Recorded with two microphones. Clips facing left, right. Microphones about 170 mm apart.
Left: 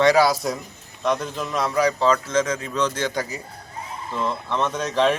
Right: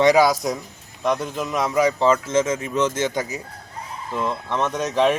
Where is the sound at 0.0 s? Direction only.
20° right (ahead or behind).